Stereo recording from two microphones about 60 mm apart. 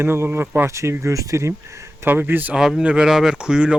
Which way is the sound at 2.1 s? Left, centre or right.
Right.